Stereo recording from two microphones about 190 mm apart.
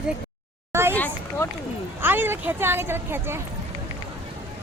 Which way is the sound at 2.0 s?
10° right (ahead or behind).